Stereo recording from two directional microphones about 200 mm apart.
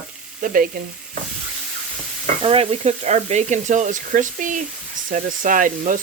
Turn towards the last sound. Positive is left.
turn(degrees=-40)  # may be behind; listen again after turning